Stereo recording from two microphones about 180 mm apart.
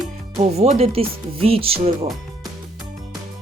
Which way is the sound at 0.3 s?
35° right (ahead or behind).